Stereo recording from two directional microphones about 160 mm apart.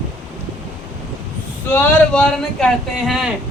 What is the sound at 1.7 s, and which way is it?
Speech, 15° left (ahead or behind).